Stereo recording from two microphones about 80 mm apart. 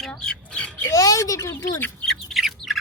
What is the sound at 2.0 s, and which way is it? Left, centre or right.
Bird, centre.